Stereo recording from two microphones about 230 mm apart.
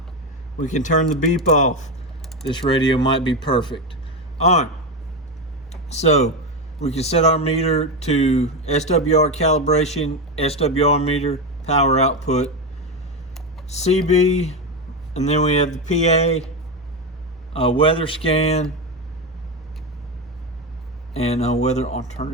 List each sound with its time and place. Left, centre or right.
0.6 s a man's voice: left
2.5 s speech: centre
4.4 s a man's voice: left
5.7 s speech: left
13.7 s speech: left
17.5 s speech: left
21.1 s speech: left